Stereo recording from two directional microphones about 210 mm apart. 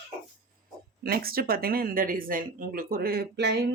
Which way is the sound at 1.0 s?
45° right (ahead or behind).